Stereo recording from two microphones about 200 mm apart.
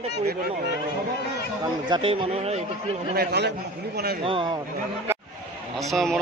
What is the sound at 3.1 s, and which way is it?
Speech, 55° right (ahead or behind).